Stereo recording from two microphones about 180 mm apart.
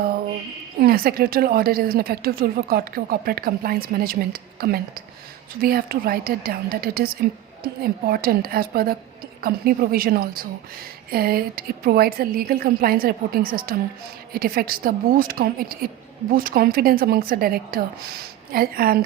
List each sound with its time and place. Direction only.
0.8 s a woman's voice: 55° right (ahead or behind)